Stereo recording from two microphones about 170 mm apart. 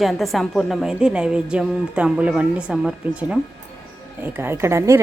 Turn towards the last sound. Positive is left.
turn(degrees=-15)  # may be behind; listen again after turning